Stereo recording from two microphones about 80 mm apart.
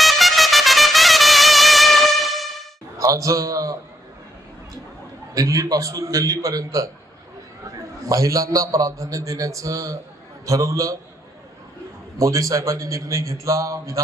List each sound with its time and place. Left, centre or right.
0.0 s trumpet: centre
3.0 s a man's voice: right
5.3 s a man's voice: right
8.1 s a man's voice: right
12.1 s a man's voice: right